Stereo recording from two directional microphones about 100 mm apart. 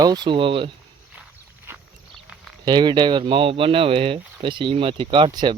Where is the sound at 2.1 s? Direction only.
Centre (ahead or behind).